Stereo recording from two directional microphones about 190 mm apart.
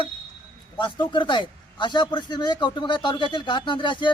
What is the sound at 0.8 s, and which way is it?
A man's voice, 25° left (ahead or behind).